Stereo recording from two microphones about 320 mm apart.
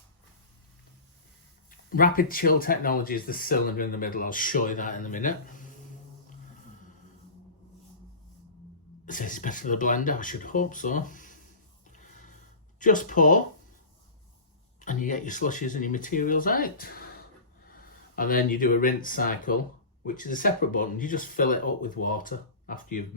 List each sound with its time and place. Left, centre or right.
1.7 s speech: left
9.0 s speech: left
11.9 s music: left
12.8 s speech: left
14.8 s speech: left
18.2 s speech: left